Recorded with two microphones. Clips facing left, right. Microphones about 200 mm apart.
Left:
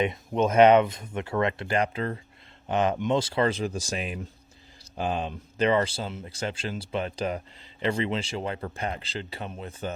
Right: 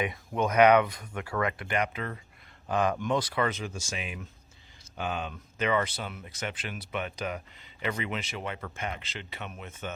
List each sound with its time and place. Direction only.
0.0 s speech: 25° left (ahead or behind)